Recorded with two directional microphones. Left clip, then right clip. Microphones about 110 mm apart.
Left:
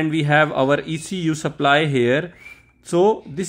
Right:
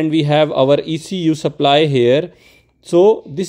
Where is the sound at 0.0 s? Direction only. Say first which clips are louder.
Right 3 dB; 25° right (ahead or behind).